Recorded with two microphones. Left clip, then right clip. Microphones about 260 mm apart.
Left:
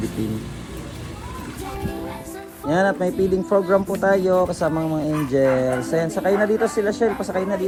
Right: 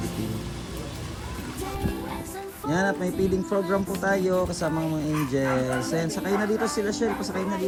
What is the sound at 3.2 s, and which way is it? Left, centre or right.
Speech, centre.